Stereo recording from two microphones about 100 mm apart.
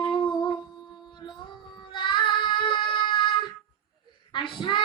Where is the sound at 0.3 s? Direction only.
50° left (ahead or behind).